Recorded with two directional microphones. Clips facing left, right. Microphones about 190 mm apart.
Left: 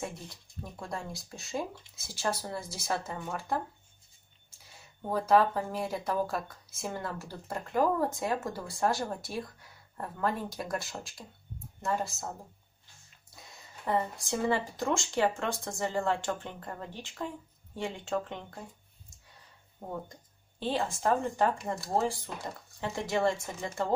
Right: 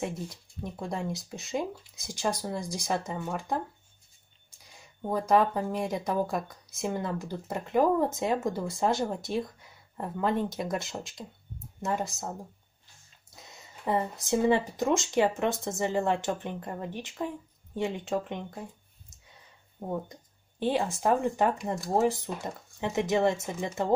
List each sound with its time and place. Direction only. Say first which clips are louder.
0.7 s speech: right 5 dB; 20° right (ahead or behind)
4.7 s speech: right 2 dB; 15° right (ahead or behind)
13.5 s speech: right 2 dB; 20° right (ahead or behind)
19.9 s speech: right 5 dB; 15° right (ahead or behind)